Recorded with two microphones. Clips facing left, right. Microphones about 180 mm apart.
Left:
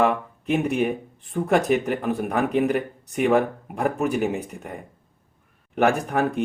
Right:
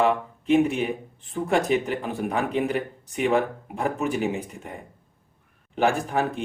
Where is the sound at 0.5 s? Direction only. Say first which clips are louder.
Right 1 dB; 55° left (ahead or behind).